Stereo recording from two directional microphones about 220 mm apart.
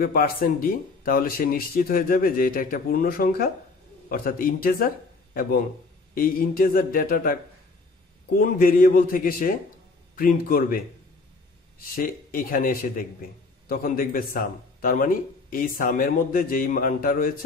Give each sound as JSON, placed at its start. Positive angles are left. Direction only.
{"t": 0.0, "sound": "speech", "side_deg": 40}
{"t": 8.4, "sound": "speech", "side_deg": 40}
{"t": 11.9, "sound": "speech", "side_deg": 40}